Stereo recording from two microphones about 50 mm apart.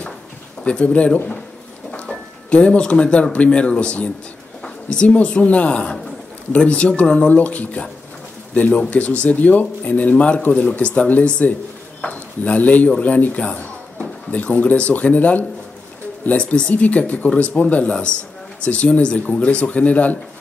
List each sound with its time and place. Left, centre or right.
0.7 s speech: left
2.5 s speech: left